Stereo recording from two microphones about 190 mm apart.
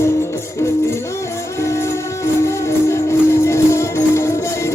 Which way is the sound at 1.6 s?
15° left (ahead or behind).